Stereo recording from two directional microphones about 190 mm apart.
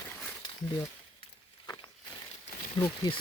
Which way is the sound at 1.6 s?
20° left (ahead or behind).